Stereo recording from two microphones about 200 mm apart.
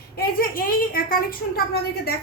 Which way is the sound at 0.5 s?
45° left (ahead or behind).